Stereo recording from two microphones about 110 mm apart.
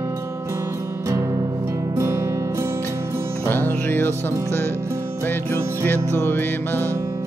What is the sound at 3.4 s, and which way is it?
Music, 20° left (ahead or behind).